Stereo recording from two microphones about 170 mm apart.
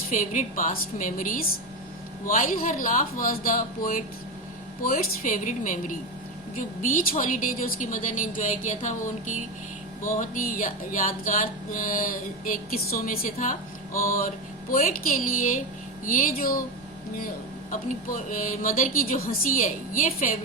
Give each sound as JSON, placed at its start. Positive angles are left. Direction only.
{"t": 0.1, "sound": "music", "side_deg": 50}
{"t": 2.2, "sound": "speech", "side_deg": 55}
{"t": 4.8, "sound": "music", "side_deg": 55}
{"t": 14.0, "sound": "speech", "side_deg": 55}
{"t": 17.7, "sound": "music", "side_deg": 55}